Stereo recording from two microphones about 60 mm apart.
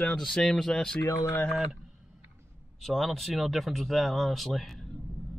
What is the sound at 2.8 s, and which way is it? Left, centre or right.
Speech, centre.